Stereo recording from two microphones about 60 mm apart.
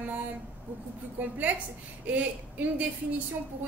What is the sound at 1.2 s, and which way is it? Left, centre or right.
A woman's voice, right.